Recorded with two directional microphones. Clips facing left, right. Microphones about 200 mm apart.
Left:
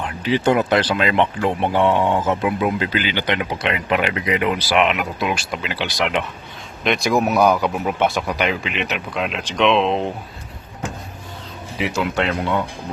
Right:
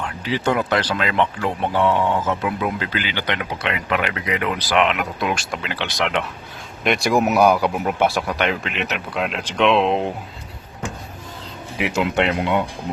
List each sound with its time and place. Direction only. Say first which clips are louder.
0.0 s speech: left 4 dB; 20° left (ahead or behind); by 6.2 s 5° left (ahead or behind)
6.8 s speech: even; 10° right (ahead or behind)
12.3 s speech: right 1 dB; 15° right (ahead or behind)